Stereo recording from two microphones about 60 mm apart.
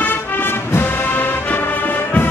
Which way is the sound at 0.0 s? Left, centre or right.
Left.